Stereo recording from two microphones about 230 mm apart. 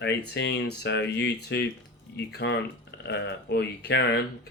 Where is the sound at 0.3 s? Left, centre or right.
Left.